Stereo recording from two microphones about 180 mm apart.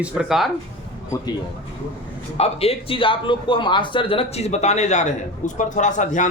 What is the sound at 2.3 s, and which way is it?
A man's voice, 35° left (ahead or behind).